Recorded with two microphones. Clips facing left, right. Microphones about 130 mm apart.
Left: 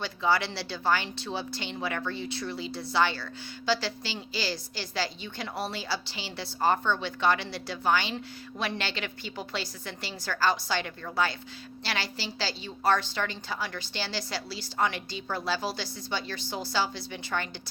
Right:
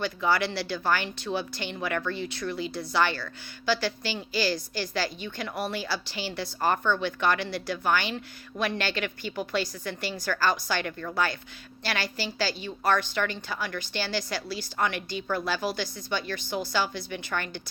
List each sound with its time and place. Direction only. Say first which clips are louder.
0.0 s a woman's voice: right 1 dB; 25° left (ahead or behind)